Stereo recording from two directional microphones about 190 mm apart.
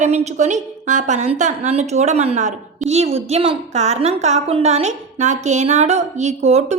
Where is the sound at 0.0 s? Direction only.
40° right (ahead or behind).